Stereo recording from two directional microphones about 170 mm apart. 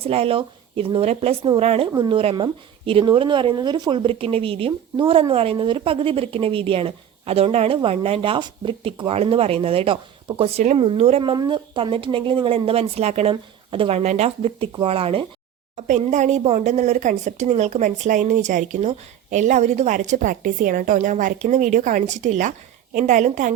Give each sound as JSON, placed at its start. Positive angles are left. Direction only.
{"t": 0.0, "sound": "speech", "side_deg": -35}